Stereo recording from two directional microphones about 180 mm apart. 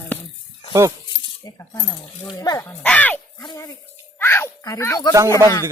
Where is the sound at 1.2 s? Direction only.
20° left (ahead or behind).